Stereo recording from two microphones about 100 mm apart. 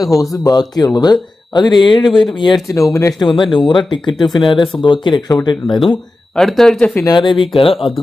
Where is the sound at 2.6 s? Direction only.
30° left (ahead or behind).